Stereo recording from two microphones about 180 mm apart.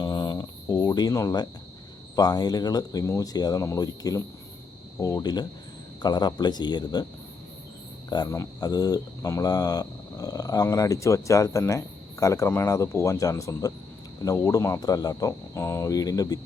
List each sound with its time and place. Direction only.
0.0 s a sound: 20° left (ahead or behind)
2.1 s speech: 20° left (ahead or behind)
8.1 s speech: 20° left (ahead or behind)